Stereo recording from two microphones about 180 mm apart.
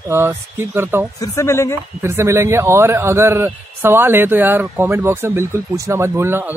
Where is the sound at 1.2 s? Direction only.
15° left (ahead or behind).